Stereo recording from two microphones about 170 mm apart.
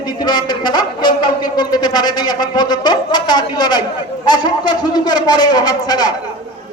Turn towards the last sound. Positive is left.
turn(degrees=25)  # may be behind; listen again after turning